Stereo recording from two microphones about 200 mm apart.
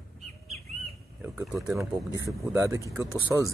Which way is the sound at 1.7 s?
15° right (ahead or behind).